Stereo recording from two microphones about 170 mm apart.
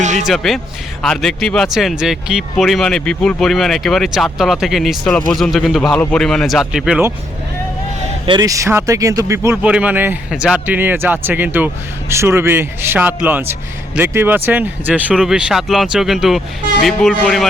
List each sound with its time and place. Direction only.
0.0 s speech: 45° right (ahead or behind)
0.3 s speech: centre (ahead or behind)
8.3 s a man's voice: 20° right (ahead or behind); by 17.5 s centre (ahead or behind)